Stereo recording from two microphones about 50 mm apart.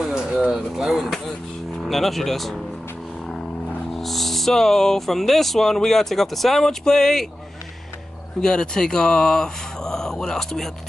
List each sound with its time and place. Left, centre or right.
0.1 s a sound: centre
0.5 s speech: centre
0.9 s a sound: centre
1.9 s speech: centre
3.9 s speech: centre
8.4 s speech: centre